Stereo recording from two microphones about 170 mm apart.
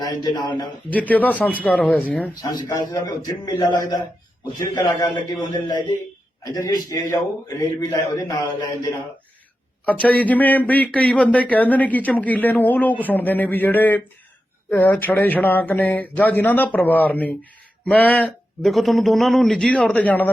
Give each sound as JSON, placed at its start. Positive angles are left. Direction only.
{"t": 0.0, "sound": "a man's voice", "side_deg": 25}
{"t": 0.9, "sound": "speech", "side_deg": 10}
{"t": 2.4, "sound": "a man's voice", "side_deg": 20}
{"t": 9.8, "sound": "speech", "side_deg": 10}